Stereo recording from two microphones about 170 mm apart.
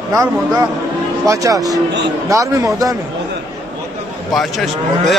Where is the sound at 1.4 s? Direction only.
20° right (ahead or behind).